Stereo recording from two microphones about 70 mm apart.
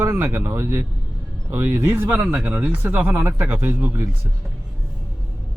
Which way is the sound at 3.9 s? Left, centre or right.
Right.